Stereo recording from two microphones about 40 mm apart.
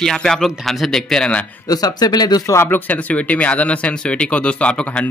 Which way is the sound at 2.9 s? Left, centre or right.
Left.